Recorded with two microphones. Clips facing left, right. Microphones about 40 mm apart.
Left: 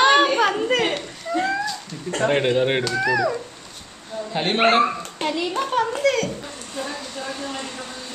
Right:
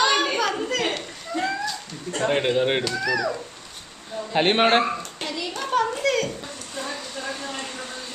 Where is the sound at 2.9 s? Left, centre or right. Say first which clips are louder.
Left 4 dB; centre.